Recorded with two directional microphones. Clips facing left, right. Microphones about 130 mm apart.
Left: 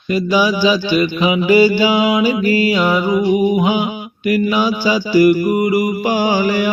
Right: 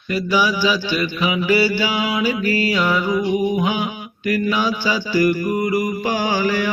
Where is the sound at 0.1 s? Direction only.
15° left (ahead or behind).